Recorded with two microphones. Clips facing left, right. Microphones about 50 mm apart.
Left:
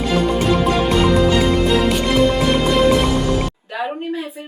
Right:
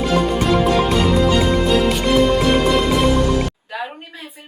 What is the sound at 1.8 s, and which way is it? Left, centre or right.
Music, centre.